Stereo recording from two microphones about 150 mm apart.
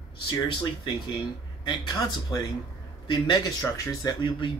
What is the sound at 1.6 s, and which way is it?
Speech, 30° left (ahead or behind).